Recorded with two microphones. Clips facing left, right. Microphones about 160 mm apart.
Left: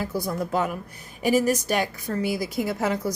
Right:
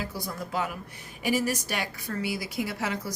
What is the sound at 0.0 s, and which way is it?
A woman's voice, 50° left (ahead or behind).